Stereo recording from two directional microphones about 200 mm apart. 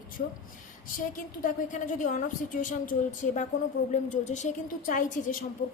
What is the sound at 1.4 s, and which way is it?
A woman's voice, 40° left (ahead or behind).